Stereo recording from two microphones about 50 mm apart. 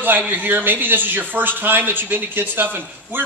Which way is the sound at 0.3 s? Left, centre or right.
Right.